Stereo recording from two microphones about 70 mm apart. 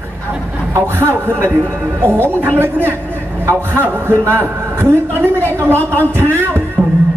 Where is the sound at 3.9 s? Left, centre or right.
Right.